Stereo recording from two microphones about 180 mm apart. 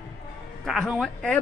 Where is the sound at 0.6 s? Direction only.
Centre (ahead or behind).